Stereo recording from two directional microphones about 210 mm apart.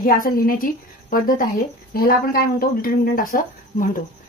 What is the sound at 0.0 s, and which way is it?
Speech, 40° left (ahead or behind).